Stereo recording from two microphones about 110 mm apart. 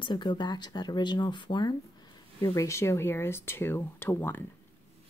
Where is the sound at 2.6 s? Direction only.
25° left (ahead or behind).